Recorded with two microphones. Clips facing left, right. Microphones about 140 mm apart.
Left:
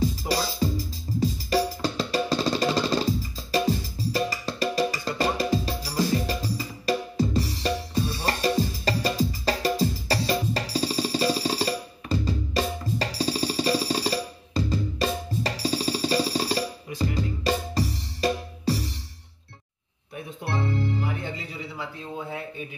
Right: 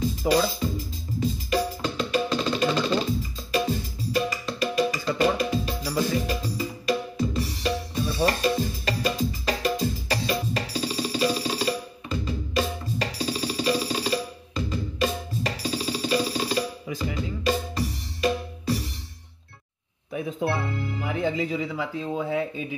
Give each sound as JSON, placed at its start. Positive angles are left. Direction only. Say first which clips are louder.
{"t": 0.3, "sound": "music", "louder": "right 3 dB", "side_deg": 35}
{"t": 20.5, "sound": "music", "louder": "left 2 dB", "side_deg": 35}